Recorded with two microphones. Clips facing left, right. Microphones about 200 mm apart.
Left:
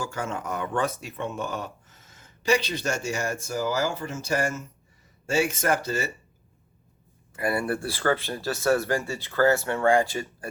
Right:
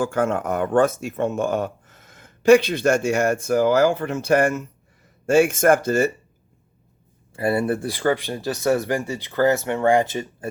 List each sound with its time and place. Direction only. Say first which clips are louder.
0.0 s speech: right 10 dB; 55° right (ahead or behind)
7.3 s speech: right 5 dB; 25° right (ahead or behind)